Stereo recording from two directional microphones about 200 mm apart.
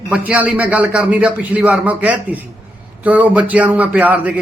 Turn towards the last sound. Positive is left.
turn(degrees=-5)  # may be behind; listen again after turning